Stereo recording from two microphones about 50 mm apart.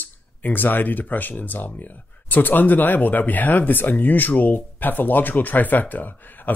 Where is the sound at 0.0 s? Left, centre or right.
Left.